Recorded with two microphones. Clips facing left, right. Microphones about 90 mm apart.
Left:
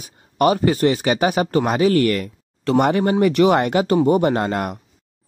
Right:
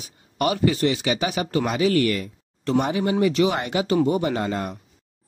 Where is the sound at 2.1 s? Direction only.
80° left.